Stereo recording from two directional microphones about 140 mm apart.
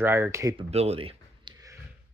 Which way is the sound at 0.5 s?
45° right (ahead or behind).